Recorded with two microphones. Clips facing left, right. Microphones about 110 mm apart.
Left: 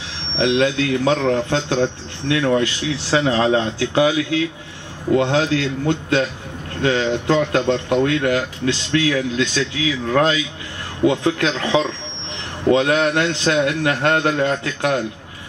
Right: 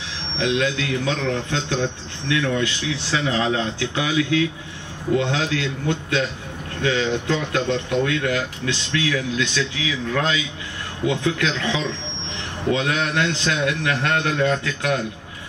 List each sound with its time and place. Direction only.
0.4 s a man's voice: 35° left (ahead or behind)